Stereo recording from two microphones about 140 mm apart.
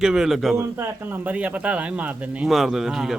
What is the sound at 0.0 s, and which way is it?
A man's voice, 5° right (ahead or behind).